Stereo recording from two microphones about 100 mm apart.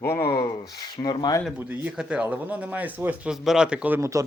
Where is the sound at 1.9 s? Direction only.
10° right (ahead or behind).